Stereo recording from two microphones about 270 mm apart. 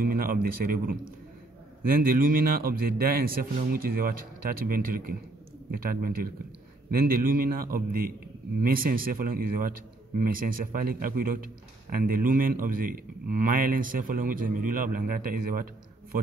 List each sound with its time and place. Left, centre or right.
0.0 s speech: right